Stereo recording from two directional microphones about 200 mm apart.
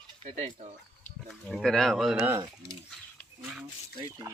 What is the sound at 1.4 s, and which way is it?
Speech, 5° left (ahead or behind).